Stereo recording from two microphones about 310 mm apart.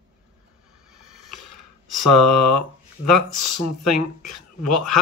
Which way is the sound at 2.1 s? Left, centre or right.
Left.